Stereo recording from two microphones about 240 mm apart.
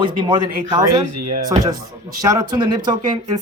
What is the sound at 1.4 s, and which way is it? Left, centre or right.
Speech, centre.